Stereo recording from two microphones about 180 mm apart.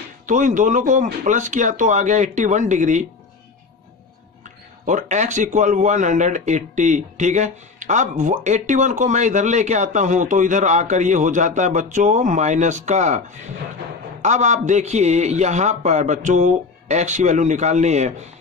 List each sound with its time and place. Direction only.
0.3 s speech: 45° right (ahead or behind)
4.8 s speech: 40° right (ahead or behind)
14.2 s a man's voice: 40° right (ahead or behind)